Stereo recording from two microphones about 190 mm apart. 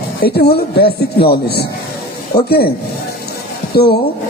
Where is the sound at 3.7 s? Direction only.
55° left (ahead or behind).